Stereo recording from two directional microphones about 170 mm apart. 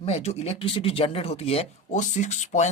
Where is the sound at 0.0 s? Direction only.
40° left (ahead or behind).